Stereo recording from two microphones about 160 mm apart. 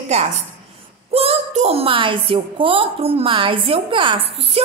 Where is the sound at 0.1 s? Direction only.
45° right (ahead or behind).